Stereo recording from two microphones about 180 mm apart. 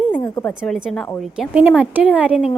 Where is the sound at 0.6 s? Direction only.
5° right (ahead or behind).